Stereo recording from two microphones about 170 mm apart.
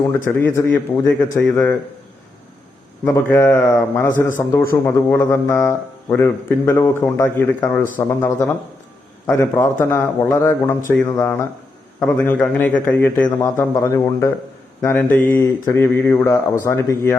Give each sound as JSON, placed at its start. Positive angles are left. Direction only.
{"t": 0.1, "sound": "speech", "side_deg": 10}
{"t": 3.0, "sound": "speech", "side_deg": 15}